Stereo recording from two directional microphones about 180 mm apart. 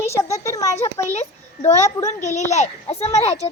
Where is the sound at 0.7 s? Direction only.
40° left (ahead or behind).